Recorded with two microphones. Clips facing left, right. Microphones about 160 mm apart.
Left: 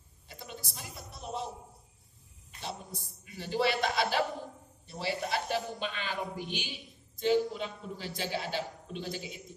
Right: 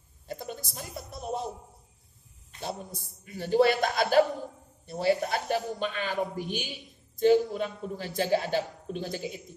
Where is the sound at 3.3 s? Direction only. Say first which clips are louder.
Right 7 dB; 45° right (ahead or behind).